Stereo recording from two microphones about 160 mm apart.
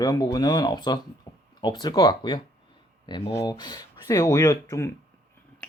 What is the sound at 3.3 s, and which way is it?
Speech, 25° left (ahead or behind).